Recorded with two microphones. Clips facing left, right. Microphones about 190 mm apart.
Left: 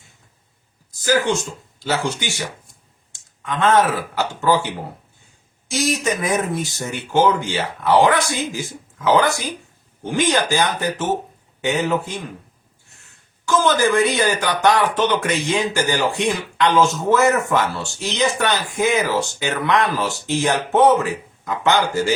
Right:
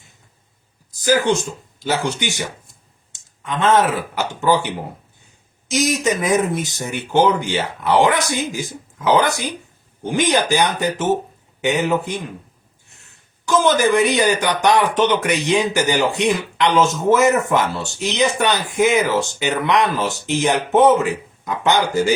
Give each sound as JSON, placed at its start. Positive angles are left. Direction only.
{"t": 1.0, "sound": "speech", "side_deg": -20}
{"t": 13.4, "sound": "speech", "side_deg": -15}